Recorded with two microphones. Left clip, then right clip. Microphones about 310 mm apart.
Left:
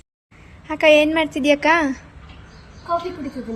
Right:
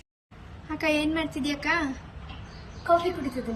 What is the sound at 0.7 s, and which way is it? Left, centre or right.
A woman's voice, centre.